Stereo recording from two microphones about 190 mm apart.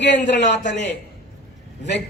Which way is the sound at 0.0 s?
65° left (ahead or behind).